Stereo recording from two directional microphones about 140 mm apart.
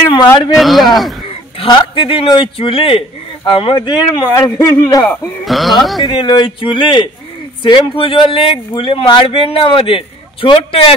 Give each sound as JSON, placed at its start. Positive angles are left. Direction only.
{"t": 0.6, "sound": "speech", "side_deg": 0}
{"t": 1.6, "sound": "a man's voice", "side_deg": 40}
{"t": 5.0, "sound": "speech", "side_deg": 10}
{"t": 5.4, "sound": "speech", "side_deg": 0}
{"t": 6.0, "sound": "a man's voice", "side_deg": 35}